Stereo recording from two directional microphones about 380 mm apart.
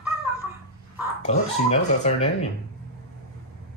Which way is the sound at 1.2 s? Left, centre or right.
Centre.